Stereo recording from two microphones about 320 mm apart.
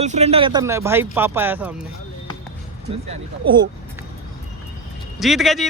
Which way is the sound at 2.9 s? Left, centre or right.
Centre.